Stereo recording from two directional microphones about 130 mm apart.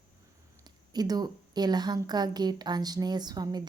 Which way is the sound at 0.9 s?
30° right (ahead or behind).